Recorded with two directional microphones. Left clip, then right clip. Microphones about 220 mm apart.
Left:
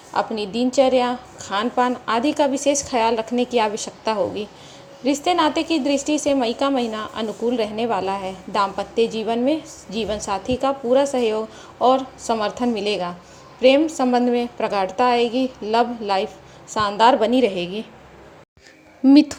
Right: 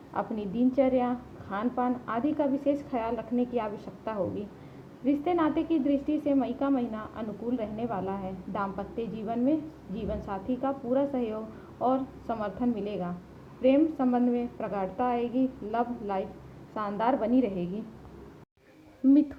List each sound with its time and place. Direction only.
0.1 s a woman's voice: 15° left (ahead or behind)
19.0 s speech: 30° left (ahead or behind)